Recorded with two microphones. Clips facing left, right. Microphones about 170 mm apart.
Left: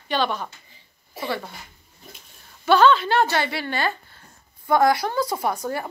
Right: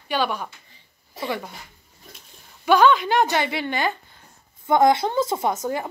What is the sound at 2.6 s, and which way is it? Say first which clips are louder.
A woman's voice: even; 15° right (ahead or behind).